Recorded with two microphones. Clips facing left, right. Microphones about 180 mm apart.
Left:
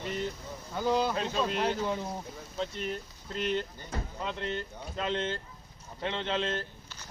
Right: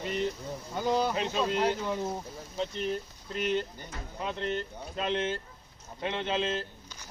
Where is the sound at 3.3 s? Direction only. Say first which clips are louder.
Right 1 dB; 15° right (ahead or behind).